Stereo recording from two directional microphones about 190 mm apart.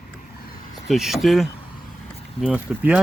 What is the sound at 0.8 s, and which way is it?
Speech, centre (ahead or behind).